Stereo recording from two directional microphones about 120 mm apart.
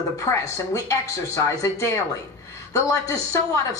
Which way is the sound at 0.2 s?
25° left (ahead or behind).